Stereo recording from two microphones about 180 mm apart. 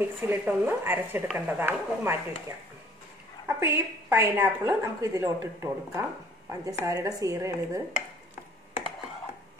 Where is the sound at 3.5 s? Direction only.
15° right (ahead or behind).